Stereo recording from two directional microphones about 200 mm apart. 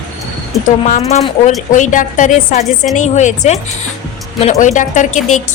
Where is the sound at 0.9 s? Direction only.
35° left (ahead or behind).